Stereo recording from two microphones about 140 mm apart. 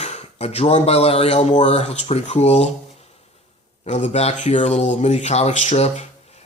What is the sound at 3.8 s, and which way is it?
Speech, 55° left (ahead or behind).